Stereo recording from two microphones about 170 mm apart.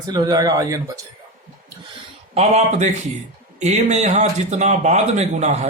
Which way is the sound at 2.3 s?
40° right (ahead or behind).